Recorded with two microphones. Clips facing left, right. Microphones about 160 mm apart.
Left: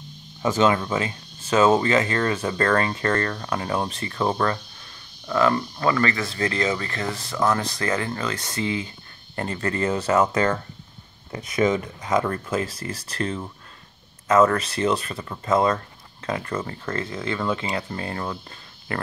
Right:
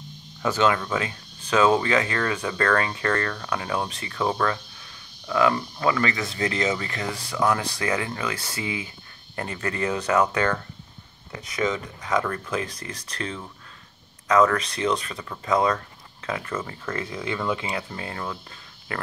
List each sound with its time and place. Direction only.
0.8 s speech: 5° left (ahead or behind)
5.3 s speech: 10° right (ahead or behind); by 10.5 s 5° left (ahead or behind)
11.6 s speech: 40° left (ahead or behind)
12.0 s speech: 10° left (ahead or behind)
16.5 s speech: 15° left (ahead or behind)
16.9 s speech: 10° right (ahead or behind); by 18.4 s 5° left (ahead or behind)